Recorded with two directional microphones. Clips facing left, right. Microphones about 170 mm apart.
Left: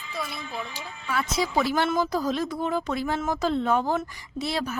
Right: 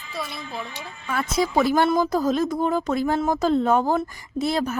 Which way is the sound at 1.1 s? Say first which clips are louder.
Right 3 dB; 50° right (ahead or behind).